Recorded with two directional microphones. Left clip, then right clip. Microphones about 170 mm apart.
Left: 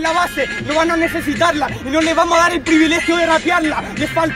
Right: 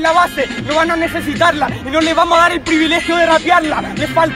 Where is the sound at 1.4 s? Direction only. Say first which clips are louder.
Right 3 dB; 10° right (ahead or behind).